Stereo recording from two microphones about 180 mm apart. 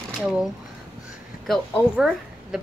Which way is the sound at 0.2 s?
5° right (ahead or behind).